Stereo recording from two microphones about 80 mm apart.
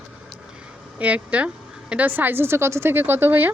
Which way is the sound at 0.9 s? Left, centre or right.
Centre.